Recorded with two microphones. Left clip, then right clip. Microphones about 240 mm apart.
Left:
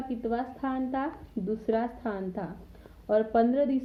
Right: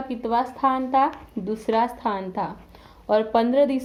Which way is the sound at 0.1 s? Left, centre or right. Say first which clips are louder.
Right 9 dB; centre.